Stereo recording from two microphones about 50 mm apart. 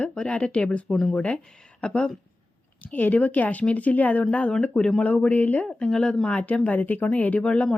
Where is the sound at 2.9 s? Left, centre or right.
Left.